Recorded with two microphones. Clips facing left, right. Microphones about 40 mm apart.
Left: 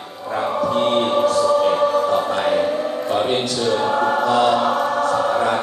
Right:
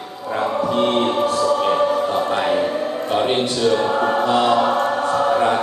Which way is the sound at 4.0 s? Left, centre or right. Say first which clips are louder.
Even; right.